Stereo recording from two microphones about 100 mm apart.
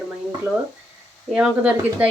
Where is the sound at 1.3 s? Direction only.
10° right (ahead or behind).